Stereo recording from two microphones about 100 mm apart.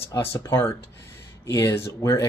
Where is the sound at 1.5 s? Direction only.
40° left (ahead or behind).